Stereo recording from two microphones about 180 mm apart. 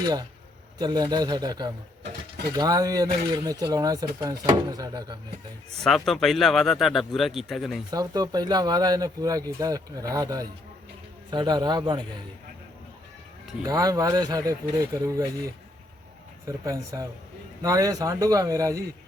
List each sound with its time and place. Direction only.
0.0 s speech: 20° right (ahead or behind)
5.8 s speech: centre (ahead or behind)
7.9 s speech: 20° right (ahead or behind)
13.7 s speech: 20° right (ahead or behind)
16.5 s speech: 15° right (ahead or behind)